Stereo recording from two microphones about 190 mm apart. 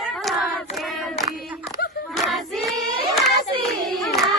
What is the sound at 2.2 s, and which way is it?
Choir, centre (ahead or behind).